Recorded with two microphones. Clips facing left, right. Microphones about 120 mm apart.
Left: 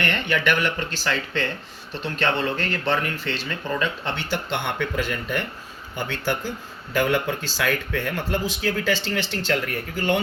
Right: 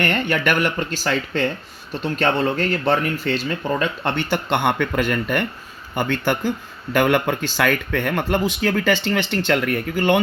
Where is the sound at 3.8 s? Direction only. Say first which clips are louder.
Right 4 dB; 55° right (ahead or behind).